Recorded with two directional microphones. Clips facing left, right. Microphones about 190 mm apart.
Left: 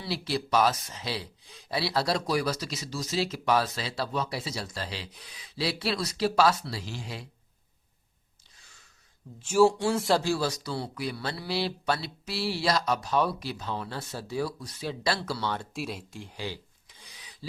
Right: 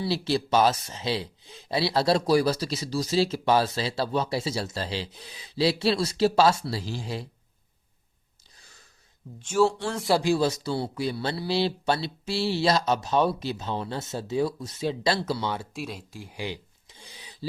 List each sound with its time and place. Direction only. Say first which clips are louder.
0.0 s speech: right 5 dB; 25° right (ahead or behind)
9.4 s speech: left 1 dB; 10° left (ahead or behind)
10.2 s speech: right 5 dB; 20° right (ahead or behind)
15.7 s speech: even; centre (ahead or behind)
16.9 s a sound: right 5 dB; 25° right (ahead or behind)